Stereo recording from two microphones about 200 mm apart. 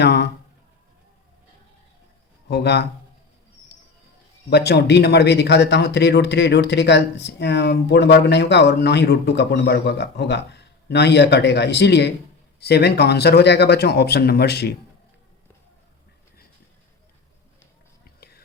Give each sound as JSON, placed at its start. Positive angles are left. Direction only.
{"t": 0.0, "sound": "speech", "side_deg": 55}
{"t": 2.5, "sound": "speech", "side_deg": 55}
{"t": 4.4, "sound": "speech", "side_deg": 55}
{"t": 18.0, "sound": "whispering", "side_deg": 50}